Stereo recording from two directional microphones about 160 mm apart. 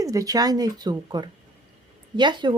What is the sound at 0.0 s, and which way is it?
Speech, 20° right (ahead or behind).